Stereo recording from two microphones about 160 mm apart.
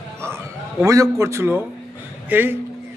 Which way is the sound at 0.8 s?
20° right (ahead or behind).